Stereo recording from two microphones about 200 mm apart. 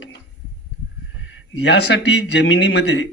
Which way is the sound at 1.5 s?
60° left (ahead or behind).